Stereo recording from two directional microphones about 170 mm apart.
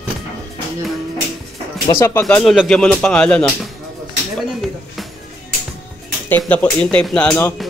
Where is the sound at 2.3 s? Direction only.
5° left (ahead or behind).